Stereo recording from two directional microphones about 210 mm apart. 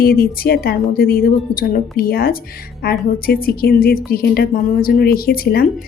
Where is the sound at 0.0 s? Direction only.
45° left (ahead or behind).